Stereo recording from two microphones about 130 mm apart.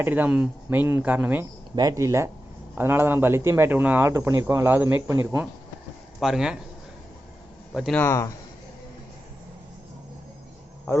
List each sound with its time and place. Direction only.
0.0 s speech: 15° right (ahead or behind)
1.7 s speech: 30° right (ahead or behind)
6.1 s speech: 5° right (ahead or behind)
7.7 s a man's voice: centre (ahead or behind)
7.9 s speech: 20° left (ahead or behind)
10.9 s speech: 20° left (ahead or behind)